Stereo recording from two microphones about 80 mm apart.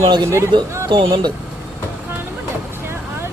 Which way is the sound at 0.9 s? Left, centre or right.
Right.